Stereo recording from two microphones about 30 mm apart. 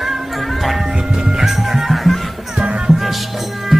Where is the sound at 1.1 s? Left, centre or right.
Centre.